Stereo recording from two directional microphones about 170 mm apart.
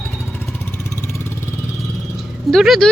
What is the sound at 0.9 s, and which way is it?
Vehicle, 15° left (ahead or behind).